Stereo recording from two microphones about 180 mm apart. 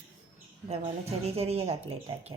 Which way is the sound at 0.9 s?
35° right (ahead or behind).